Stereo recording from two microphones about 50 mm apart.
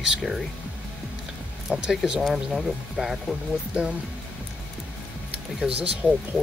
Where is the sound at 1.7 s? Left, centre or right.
Centre.